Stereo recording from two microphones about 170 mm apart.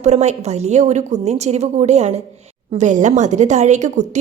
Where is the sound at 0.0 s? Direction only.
40° right (ahead or behind).